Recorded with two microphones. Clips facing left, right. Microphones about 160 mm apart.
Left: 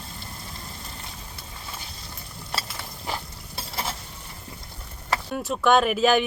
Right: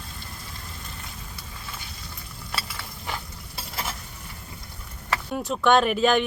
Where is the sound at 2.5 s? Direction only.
35° left (ahead or behind).